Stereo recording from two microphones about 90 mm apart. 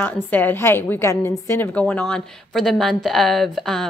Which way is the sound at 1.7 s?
15° left (ahead or behind).